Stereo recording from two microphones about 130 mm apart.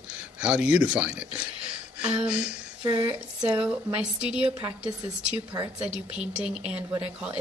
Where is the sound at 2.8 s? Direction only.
35° right (ahead or behind).